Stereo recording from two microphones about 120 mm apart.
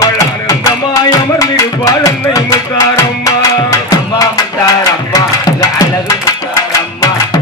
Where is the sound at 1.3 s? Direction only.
25° left (ahead or behind).